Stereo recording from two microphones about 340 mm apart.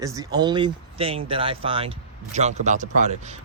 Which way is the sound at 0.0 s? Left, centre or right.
Centre.